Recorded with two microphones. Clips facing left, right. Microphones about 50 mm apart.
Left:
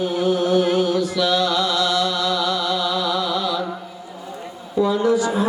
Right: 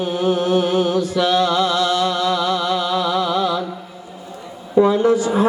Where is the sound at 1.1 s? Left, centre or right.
Right.